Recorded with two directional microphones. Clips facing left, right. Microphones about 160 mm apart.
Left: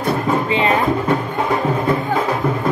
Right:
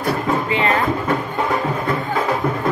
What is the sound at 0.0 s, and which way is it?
Music, 20° left (ahead or behind).